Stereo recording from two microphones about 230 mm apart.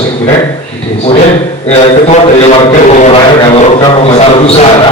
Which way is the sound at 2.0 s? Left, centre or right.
Left.